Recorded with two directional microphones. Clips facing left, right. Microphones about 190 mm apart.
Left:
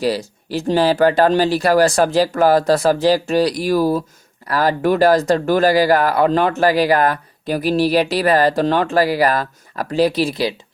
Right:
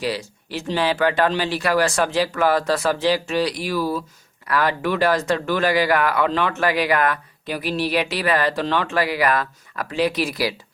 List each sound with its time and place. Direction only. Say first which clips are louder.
0.0 s speech: left 6 dB; 40° left (ahead or behind)